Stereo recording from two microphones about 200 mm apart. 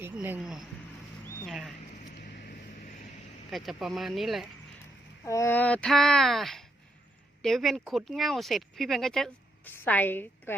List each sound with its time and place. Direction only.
0.0 s speech: 10° right (ahead or behind)
1.2 s a sound: centre (ahead or behind)
2.0 s vehicle: 45° left (ahead or behind)
3.5 s speech: centre (ahead or behind)
5.2 s speech: 15° left (ahead or behind)